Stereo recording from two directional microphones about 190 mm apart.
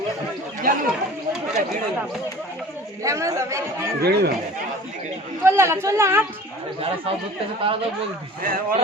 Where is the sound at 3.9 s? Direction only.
55° right (ahead or behind).